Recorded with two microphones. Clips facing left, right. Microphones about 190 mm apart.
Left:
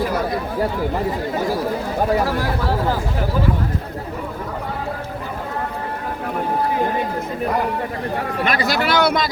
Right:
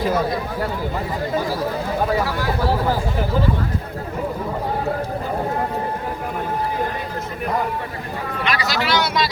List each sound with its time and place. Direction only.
8.4 s speech: 55° left (ahead or behind)